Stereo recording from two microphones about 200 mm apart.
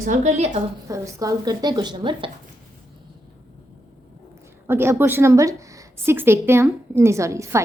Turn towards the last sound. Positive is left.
turn(degrees=-15)  # may be behind; listen again after turning